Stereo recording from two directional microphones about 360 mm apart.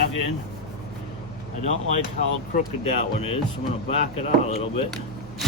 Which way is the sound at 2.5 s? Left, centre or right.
Centre.